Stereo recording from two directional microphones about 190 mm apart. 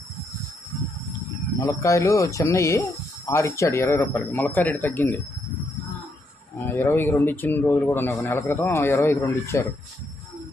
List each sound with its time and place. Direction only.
1.6 s a man's voice: 15° left (ahead or behind)
6.7 s a man's voice: 10° left (ahead or behind)